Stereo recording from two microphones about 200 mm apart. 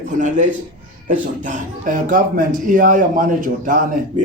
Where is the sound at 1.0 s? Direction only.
40° right (ahead or behind).